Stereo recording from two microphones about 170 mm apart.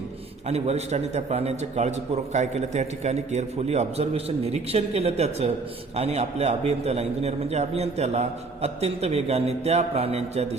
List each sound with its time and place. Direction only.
0.4 s a man's voice: 40° right (ahead or behind)